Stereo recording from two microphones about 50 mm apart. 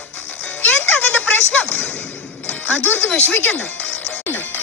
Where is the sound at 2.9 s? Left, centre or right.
Left.